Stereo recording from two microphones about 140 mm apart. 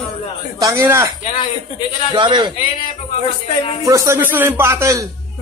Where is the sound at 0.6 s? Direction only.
20° right (ahead or behind).